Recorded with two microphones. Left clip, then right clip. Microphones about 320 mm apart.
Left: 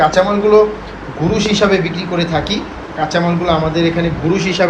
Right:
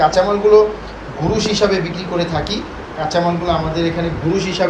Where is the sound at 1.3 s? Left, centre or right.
Right.